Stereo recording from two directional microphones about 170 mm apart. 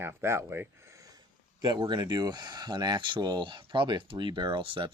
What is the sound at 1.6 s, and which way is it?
Speech, 25° right (ahead or behind).